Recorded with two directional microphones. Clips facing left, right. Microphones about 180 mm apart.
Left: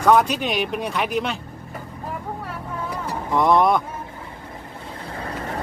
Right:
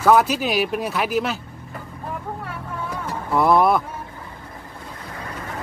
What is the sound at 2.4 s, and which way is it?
Music, 5° left (ahead or behind).